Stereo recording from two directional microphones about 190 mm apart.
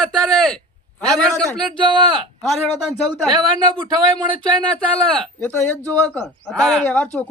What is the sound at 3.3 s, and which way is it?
Speech, 25° right (ahead or behind).